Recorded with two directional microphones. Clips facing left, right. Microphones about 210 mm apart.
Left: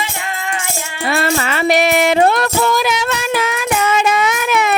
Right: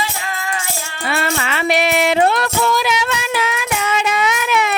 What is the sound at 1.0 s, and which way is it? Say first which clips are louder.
Music: left 4 dB; 40° left (ahead or behind).